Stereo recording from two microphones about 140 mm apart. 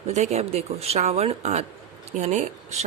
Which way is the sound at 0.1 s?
55° right (ahead or behind).